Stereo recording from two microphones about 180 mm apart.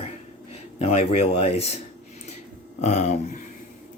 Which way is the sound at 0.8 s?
35° left (ahead or behind).